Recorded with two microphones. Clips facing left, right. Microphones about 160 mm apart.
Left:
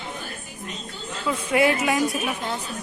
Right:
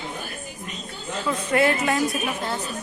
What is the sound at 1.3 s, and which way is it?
Speech, 10° left (ahead or behind).